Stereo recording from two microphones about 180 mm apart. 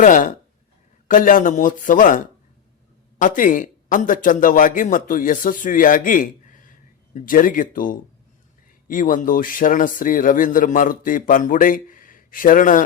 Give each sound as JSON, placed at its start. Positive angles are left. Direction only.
{"t": 0.0, "sound": "a man's voice", "side_deg": 45}